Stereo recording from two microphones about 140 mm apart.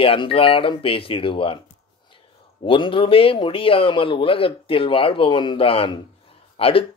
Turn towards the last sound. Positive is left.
turn(degrees=40)  # may be behind; listen again after turning